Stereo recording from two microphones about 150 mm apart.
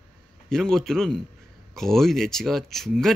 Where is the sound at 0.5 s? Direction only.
5° left (ahead or behind).